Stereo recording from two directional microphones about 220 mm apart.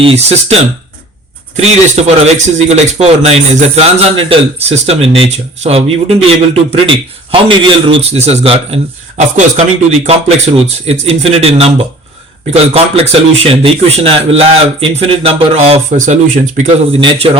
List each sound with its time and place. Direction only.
0.0 s speech: 25° right (ahead or behind)
12.7 s speech: 30° right (ahead or behind)